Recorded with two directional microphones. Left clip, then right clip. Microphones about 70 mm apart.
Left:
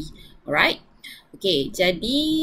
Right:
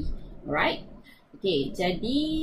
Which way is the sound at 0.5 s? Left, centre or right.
Left.